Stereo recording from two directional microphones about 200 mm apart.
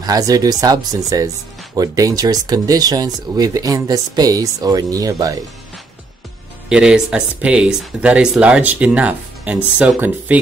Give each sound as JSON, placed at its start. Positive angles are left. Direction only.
{"t": 0.0, "sound": "speech", "side_deg": -20}
{"t": 6.7, "sound": "speech", "side_deg": -5}